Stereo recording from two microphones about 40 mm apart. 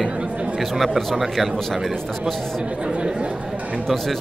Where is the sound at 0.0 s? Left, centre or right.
Right.